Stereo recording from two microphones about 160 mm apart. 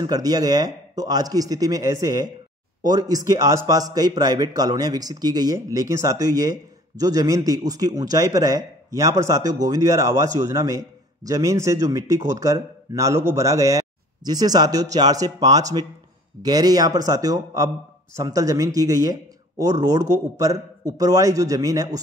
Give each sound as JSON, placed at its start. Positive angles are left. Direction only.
{"t": 0.0, "sound": "a man's voice", "side_deg": -25}